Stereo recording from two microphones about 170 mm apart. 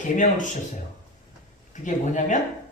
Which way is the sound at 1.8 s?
45° left (ahead or behind).